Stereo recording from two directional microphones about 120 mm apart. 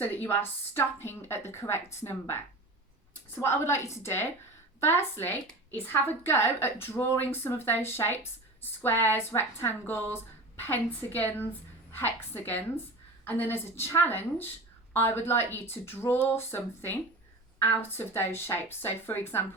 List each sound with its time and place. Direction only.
0.0 s a woman's voice: 15° left (ahead or behind)